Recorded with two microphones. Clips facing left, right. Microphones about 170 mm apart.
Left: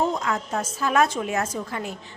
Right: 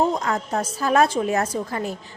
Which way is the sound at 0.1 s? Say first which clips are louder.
Right 2 dB; 35° right (ahead or behind).